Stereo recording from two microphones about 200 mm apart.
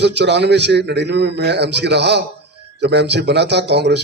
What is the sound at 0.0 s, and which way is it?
A man's voice, 60° right (ahead or behind).